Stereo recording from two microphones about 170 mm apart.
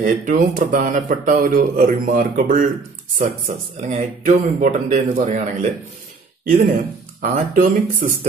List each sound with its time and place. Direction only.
0.0 s speech: 50° right (ahead or behind)